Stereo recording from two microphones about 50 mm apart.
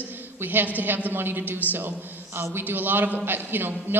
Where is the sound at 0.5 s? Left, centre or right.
Right.